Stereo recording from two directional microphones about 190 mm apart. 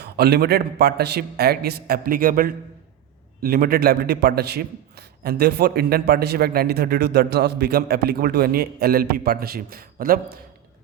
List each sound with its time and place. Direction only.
0.0 s a man's voice: 55° right (ahead or behind)